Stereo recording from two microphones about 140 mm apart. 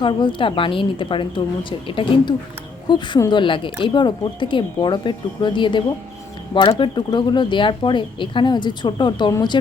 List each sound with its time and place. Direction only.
0.0 s speech: 35° left (ahead or behind)